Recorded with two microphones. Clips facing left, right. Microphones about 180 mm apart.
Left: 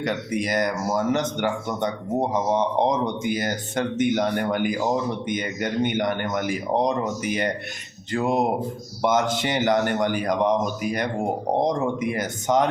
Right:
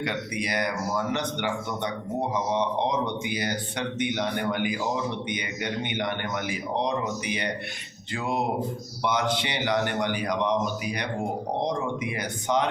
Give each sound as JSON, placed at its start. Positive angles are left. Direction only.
{"t": 0.0, "sound": "speech", "side_deg": 45}